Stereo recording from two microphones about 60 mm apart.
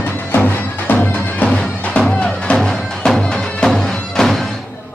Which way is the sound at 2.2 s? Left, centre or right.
Centre.